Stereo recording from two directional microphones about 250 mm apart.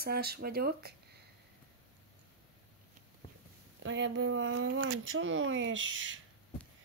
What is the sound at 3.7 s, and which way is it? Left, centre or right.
Speech, right.